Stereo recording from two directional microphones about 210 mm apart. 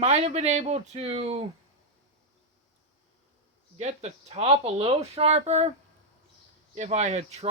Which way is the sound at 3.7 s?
30° right (ahead or behind).